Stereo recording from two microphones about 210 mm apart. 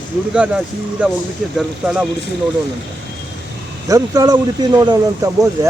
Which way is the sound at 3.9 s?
15° right (ahead or behind).